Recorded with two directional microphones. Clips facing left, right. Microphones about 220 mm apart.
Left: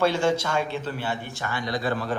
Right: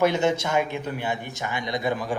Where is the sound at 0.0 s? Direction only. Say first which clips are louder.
Right 1 dB; 20° right (ahead or behind).